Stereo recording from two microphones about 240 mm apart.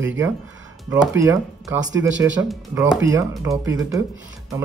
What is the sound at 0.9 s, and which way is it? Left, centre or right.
Speech, centre.